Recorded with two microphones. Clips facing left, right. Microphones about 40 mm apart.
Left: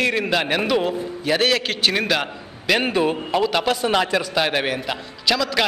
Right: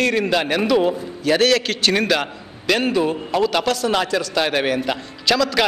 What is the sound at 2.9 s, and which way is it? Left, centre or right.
Speech, left.